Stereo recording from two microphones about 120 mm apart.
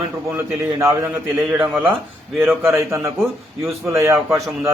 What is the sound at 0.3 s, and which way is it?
A man's voice, 20° right (ahead or behind).